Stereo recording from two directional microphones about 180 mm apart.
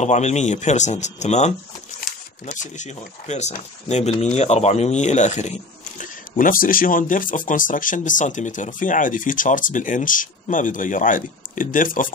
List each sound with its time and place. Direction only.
0.0 s speech: 40° left (ahead or behind)